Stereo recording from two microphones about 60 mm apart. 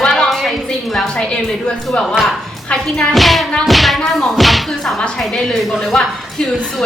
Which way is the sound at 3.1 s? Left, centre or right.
Centre.